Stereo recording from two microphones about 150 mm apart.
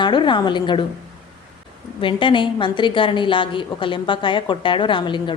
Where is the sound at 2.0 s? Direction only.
35° left (ahead or behind).